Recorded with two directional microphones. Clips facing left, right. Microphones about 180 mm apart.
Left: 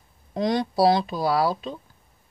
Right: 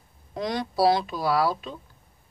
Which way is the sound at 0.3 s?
30° left (ahead or behind).